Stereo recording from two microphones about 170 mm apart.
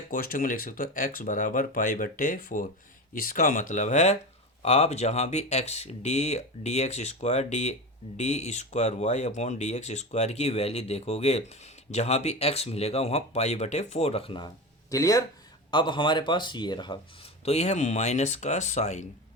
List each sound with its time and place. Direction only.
0.1 s speech: 55° left (ahead or behind); by 17.0 s 25° left (ahead or behind)
17.4 s speech: 40° left (ahead or behind)